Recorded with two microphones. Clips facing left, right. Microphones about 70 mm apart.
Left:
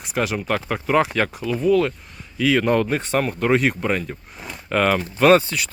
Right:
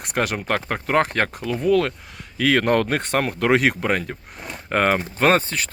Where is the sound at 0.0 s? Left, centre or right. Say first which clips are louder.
Even; right.